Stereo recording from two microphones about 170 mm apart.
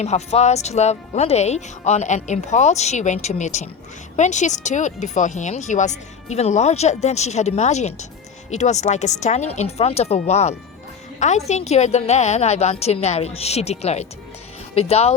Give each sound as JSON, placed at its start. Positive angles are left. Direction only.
{"t": 0.0, "sound": "speech", "side_deg": 40}